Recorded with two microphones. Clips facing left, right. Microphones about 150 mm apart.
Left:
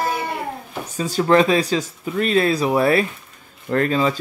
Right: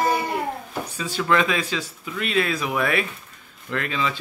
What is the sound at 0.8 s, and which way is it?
A man's voice, 40° left (ahead or behind).